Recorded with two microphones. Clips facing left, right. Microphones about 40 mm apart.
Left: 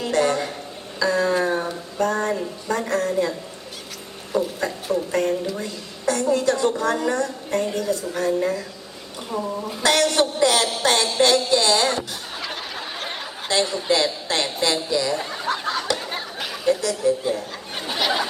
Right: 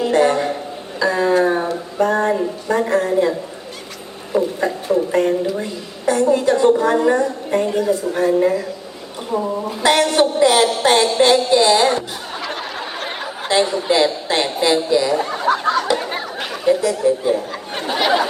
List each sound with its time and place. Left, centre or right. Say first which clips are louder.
0.0 s a sound: right 6 dB; right
6.1 s a woman's voice: right 5 dB; right
13.1 s a woman's voice: right 6 dB; centre
15.9 s a sound: right 6 dB; right
16.4 s chatter: right 4 dB; centre
16.8 s speech: right 5 dB; centre